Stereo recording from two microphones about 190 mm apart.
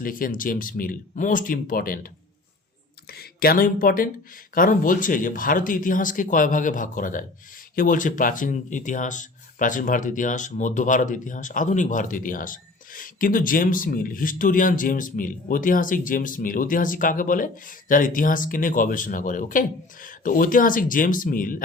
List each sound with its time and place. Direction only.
0.0 s speech: 45° left (ahead or behind)
3.1 s speech: 55° left (ahead or behind)